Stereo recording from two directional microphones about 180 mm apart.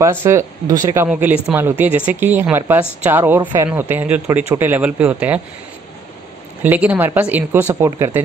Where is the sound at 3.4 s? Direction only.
25° right (ahead or behind).